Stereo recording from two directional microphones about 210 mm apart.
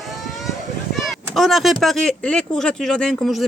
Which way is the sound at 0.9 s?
Centre (ahead or behind).